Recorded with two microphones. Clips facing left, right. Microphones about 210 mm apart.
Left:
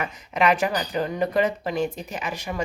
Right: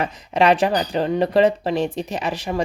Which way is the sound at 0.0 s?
30° right (ahead or behind).